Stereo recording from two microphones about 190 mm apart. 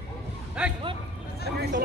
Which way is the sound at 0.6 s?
5° right (ahead or behind).